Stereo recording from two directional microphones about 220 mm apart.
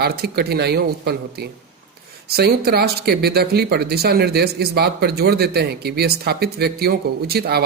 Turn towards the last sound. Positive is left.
turn(degrees=-45)  # may be behind; listen again after turning